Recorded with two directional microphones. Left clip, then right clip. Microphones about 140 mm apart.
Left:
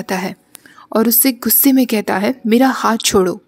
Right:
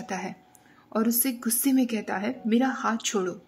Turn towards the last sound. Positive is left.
turn(degrees=45)  # may be behind; listen again after turning